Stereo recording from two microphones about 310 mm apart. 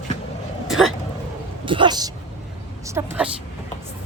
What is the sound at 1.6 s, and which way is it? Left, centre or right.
A woman's voice, centre.